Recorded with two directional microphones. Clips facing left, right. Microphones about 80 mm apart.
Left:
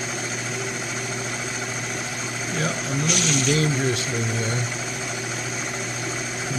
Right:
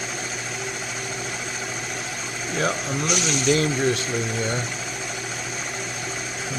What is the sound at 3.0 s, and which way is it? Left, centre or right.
Speech, centre.